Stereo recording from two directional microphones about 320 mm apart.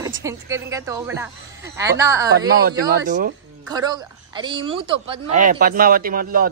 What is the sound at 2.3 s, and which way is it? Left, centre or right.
Speech, right.